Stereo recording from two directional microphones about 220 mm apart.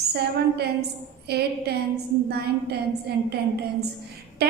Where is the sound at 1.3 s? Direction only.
45° right (ahead or behind).